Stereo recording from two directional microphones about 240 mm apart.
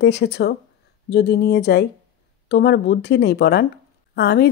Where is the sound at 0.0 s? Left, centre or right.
Left.